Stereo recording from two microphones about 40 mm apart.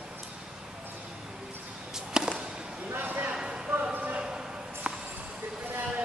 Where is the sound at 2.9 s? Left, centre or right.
Right.